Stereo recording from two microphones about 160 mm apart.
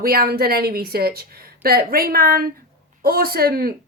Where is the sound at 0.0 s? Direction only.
70° right (ahead or behind).